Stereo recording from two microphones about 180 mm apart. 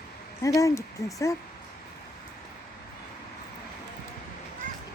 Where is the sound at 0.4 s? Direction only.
15° left (ahead or behind).